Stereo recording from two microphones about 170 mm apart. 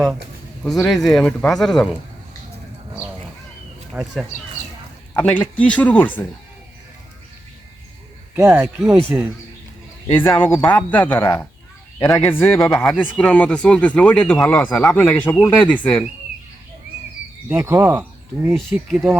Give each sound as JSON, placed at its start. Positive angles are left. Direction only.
{"t": 0.6, "sound": "speech", "side_deg": 5}
{"t": 3.9, "sound": "speech", "side_deg": 0}
{"t": 5.1, "sound": "speech", "side_deg": 10}
{"t": 8.4, "sound": "speech", "side_deg": -15}
{"t": 10.1, "sound": "speech", "side_deg": 10}
{"t": 17.5, "sound": "speech", "side_deg": -15}
{"t": 18.5, "sound": "speech", "side_deg": 0}